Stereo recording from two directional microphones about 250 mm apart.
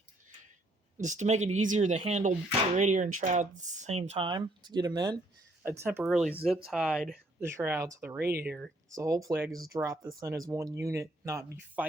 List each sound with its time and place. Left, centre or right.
0.9 s speech: right; by 8.7 s centre
8.9 s speech: centre